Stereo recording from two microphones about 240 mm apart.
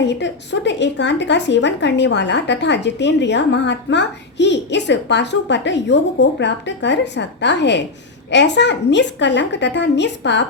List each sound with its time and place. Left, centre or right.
0.0 s speech: left